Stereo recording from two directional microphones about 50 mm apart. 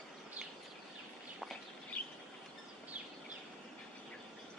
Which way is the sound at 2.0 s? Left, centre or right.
Left.